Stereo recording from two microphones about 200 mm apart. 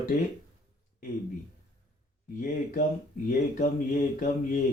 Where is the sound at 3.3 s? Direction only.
40° left (ahead or behind).